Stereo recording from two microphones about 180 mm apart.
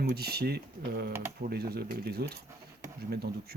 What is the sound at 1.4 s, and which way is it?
Speech, 60° right (ahead or behind).